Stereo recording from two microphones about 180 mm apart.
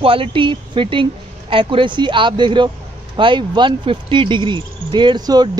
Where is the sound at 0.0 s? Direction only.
30° right (ahead or behind).